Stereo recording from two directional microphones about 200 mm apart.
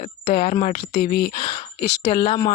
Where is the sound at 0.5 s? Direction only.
35° left (ahead or behind).